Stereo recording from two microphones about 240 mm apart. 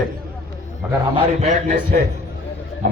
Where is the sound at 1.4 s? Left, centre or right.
Right.